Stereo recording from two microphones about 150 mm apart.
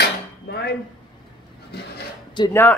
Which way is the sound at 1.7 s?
90° left.